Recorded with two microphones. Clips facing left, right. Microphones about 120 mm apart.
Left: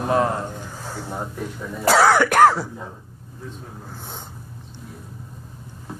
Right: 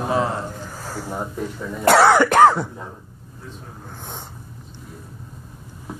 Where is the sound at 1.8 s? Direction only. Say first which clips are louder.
Right 2 dB; centre (ahead or behind).